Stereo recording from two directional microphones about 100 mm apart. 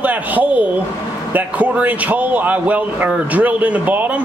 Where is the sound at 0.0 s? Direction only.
15° right (ahead or behind).